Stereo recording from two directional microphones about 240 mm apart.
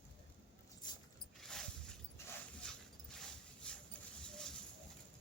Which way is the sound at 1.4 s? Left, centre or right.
Centre.